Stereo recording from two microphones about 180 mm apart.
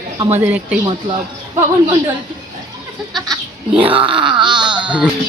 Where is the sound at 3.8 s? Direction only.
30° right (ahead or behind).